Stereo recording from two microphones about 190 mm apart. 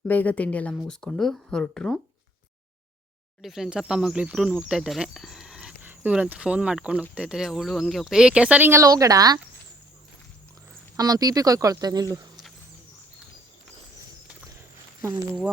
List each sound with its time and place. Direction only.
0.1 s speech: 10° left (ahead or behind)
3.4 s speech: centre (ahead or behind); by 9.4 s 20° right (ahead or behind)
10.9 s speech: 20° right (ahead or behind)